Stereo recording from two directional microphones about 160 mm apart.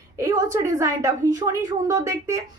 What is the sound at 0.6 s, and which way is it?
A woman's voice, 20° right (ahead or behind).